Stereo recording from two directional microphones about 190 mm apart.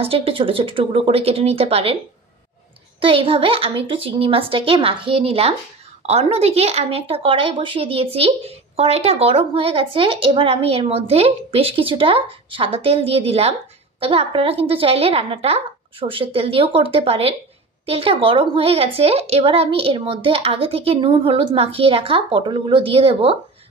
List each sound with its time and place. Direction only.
0.0 s speech: 30° right (ahead or behind)
3.0 s speech: 30° right (ahead or behind)